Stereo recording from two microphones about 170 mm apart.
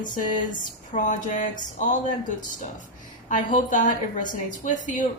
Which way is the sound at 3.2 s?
50° left (ahead or behind).